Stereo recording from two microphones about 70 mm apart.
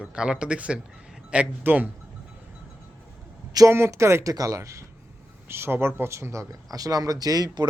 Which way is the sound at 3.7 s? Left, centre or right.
Right.